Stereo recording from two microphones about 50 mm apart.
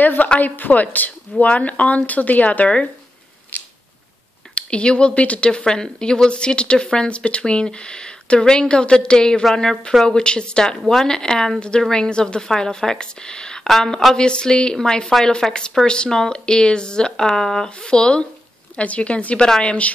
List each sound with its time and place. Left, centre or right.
0.0 s a woman's voice: left
3.5 s a sound: left
4.6 s speech: left